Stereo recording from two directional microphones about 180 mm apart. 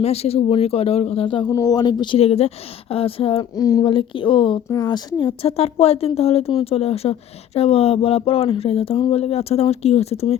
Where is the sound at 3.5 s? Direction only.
20° left (ahead or behind).